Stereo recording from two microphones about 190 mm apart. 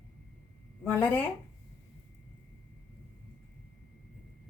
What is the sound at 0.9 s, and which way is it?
Speech, 10° left (ahead or behind).